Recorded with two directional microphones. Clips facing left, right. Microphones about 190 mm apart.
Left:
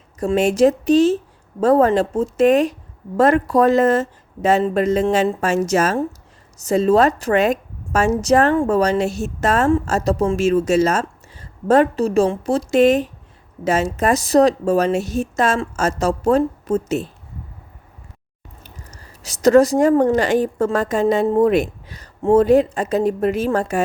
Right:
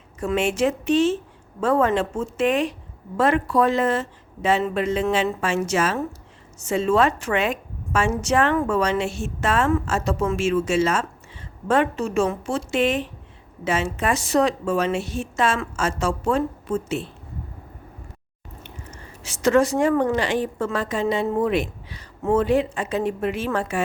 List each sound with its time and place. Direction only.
0.2 s a woman's voice: 40° left (ahead or behind)
18.6 s a woman's voice: 40° left (ahead or behind)